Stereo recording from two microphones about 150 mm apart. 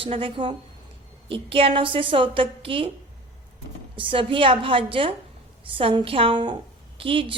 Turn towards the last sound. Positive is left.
turn(degrees=-35)  # may be behind; listen again after turning